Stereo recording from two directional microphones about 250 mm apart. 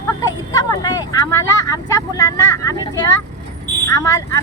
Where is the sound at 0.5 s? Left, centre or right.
Centre.